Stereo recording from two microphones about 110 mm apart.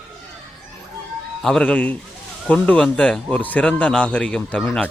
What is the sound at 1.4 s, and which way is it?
Speech, 5° left (ahead or behind).